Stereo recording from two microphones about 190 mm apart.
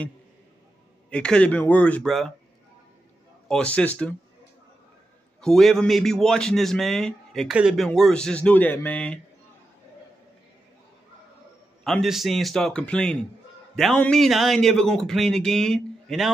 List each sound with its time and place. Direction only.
1.1 s a man's voice: 5° left (ahead or behind)
3.4 s a man's voice: 5° left (ahead or behind)
5.4 s a man's voice: centre (ahead or behind)
11.8 s a man's voice: centre (ahead or behind)